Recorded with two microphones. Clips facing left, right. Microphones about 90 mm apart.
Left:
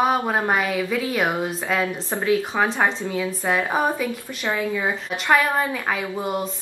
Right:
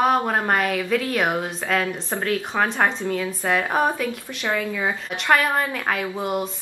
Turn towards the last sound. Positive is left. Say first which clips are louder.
# right 1 dB
turn(degrees=-5)  # may be behind; listen again after turning